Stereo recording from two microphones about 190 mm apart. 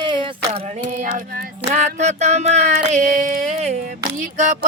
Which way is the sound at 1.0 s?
45° right (ahead or behind).